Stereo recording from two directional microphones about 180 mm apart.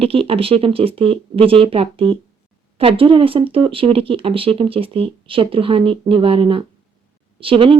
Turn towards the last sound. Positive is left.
turn(degrees=-30)  # may be behind; listen again after turning